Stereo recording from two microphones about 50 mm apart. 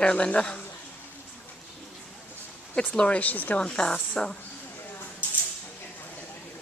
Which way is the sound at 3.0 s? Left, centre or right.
Left.